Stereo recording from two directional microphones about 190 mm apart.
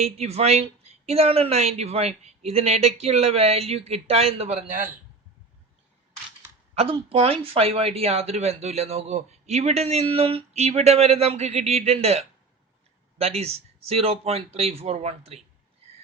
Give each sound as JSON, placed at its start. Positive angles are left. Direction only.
{"t": 0.0, "sound": "speech", "side_deg": -35}
{"t": 6.7, "sound": "speech", "side_deg": -30}